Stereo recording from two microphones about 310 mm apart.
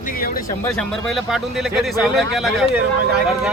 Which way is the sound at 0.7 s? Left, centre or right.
Centre.